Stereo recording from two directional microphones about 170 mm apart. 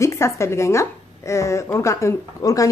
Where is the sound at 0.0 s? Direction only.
15° left (ahead or behind).